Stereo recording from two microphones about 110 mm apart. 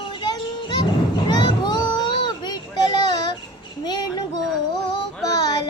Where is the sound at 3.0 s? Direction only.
40° left (ahead or behind).